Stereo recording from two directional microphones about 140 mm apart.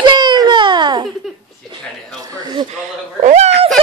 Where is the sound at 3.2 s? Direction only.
55° right (ahead or behind).